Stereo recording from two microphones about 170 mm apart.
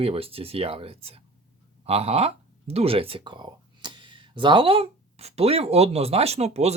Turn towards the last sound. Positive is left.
turn(degrees=-40)  # may be behind; listen again after turning